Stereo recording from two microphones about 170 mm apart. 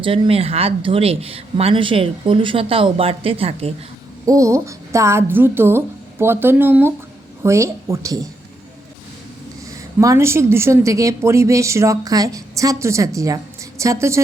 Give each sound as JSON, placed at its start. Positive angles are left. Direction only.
{"t": 0.0, "sound": "speech", "side_deg": -30}
{"t": 4.3, "sound": "a woman's voice", "side_deg": -20}
{"t": 10.0, "sound": "a woman's voice", "side_deg": -15}